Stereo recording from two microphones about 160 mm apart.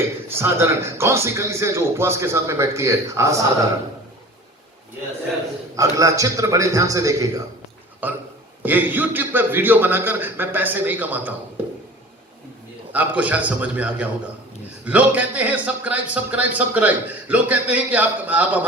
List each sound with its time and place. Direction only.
0.3 s speech: 15° right (ahead or behind)
5.7 s a man's voice: 20° right (ahead or behind)
12.9 s speech: 10° right (ahead or behind)